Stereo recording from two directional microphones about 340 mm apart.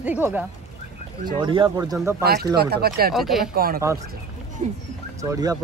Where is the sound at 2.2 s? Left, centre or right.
Right.